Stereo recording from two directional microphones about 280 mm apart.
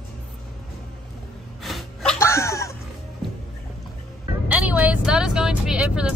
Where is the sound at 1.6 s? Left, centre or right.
Centre.